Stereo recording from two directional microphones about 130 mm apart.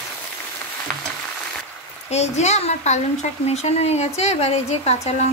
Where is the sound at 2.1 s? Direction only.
60° left (ahead or behind).